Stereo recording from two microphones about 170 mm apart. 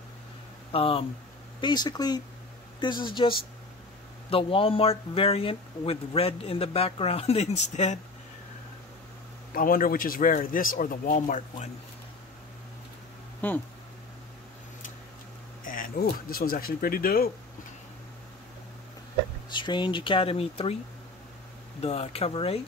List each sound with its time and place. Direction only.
0.7 s speech: 35° left (ahead or behind)
9.5 s a man's voice: 55° left (ahead or behind)
13.4 s speech: 10° left (ahead or behind)
15.6 s a man's voice: 55° left (ahead or behind)
19.5 s speech: 25° left (ahead or behind)
21.8 s speech: 40° left (ahead or behind)